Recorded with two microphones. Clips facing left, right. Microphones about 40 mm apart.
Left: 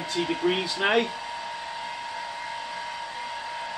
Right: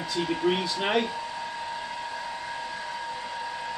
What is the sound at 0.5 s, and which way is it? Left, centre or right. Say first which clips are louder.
Speech: left 2 dB; left.